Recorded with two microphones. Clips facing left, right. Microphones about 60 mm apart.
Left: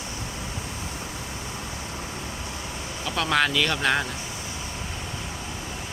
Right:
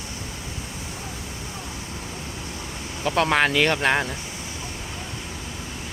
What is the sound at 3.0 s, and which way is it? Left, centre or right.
Speech, right.